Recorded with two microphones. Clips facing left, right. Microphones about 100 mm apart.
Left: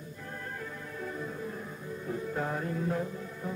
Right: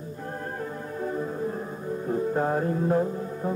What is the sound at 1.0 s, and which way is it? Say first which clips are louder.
Music: right 9 dB; 40° right (ahead or behind).